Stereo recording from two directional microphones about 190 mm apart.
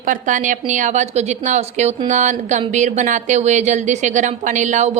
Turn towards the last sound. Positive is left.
turn(degrees=-40)  # may be behind; listen again after turning